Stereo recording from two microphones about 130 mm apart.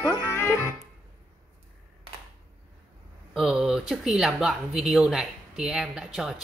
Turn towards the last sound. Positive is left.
turn(degrees=-5)  # may be behind; listen again after turning